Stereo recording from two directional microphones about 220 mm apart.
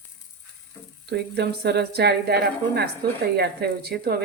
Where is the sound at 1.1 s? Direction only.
50° right (ahead or behind).